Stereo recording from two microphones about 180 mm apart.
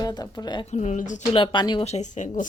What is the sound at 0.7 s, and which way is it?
Speech, 40° left (ahead or behind).